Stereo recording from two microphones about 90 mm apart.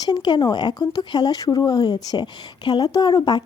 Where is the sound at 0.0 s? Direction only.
55° left (ahead or behind).